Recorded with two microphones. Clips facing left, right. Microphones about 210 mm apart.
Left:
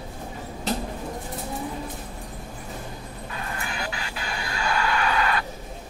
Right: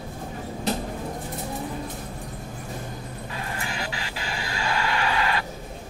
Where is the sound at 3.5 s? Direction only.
25° right (ahead or behind).